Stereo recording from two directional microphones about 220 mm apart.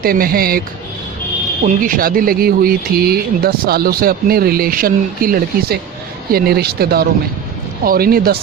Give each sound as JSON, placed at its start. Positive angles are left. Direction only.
{"t": 0.0, "sound": "speech", "side_deg": -40}
{"t": 1.6, "sound": "speech", "side_deg": -40}